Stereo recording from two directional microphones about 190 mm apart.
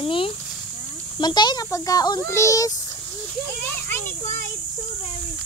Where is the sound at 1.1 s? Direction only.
20° left (ahead or behind).